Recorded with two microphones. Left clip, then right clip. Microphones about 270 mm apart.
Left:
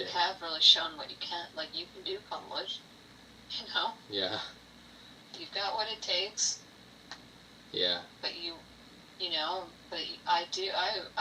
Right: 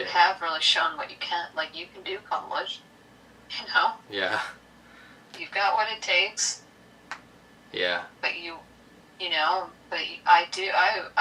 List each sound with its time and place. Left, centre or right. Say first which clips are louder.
0.0 s a woman's voice: right 10 dB; centre
5.5 s a woman's voice: right 10 dB; centre
7.7 s a woman's voice: right 4 dB; centre